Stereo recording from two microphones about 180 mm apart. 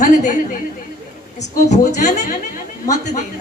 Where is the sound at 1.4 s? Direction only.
40° left (ahead or behind).